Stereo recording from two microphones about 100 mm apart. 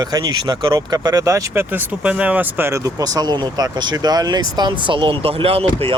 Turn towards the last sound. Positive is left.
turn(degrees=-75)  # may be behind; listen again after turning